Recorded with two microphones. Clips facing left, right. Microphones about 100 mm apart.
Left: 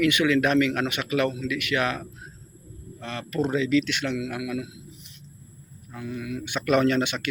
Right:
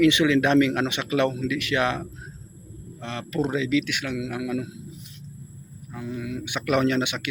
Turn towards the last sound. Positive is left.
turn(degrees=-15)  # may be behind; listen again after turning